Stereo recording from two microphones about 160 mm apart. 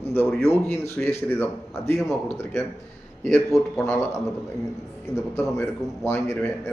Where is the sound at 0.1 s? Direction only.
5° left (ahead or behind).